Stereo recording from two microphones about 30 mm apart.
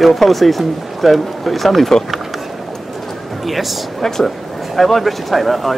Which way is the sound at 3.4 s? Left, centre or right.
Centre.